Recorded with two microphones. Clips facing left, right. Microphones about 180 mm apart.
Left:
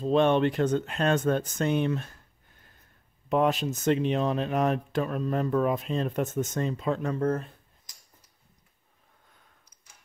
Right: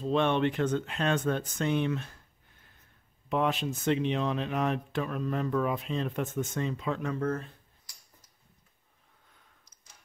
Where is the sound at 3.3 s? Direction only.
45° left (ahead or behind).